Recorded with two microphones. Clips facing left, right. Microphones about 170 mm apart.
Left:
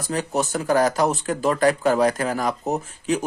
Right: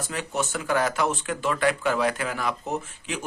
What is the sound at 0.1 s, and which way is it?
Speech, 35° left (ahead or behind).